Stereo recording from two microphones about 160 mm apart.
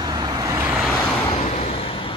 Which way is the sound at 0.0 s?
25° right (ahead or behind).